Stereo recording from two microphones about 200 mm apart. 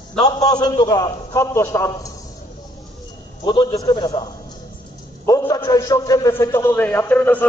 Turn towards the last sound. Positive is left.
turn(degrees=10)  # may be behind; listen again after turning